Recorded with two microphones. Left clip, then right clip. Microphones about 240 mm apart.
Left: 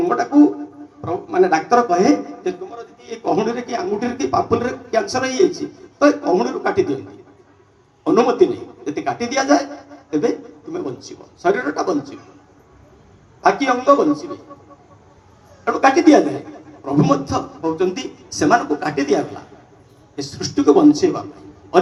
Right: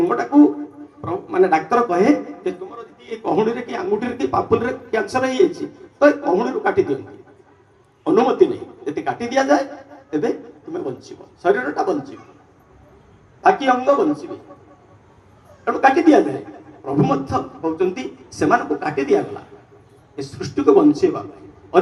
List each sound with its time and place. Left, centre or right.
0.0 s a sound: centre
1.0 s a man's voice: centre; by 7.0 s left
8.0 s speech: left
13.4 s a man's voice: left
15.6 s a man's voice: left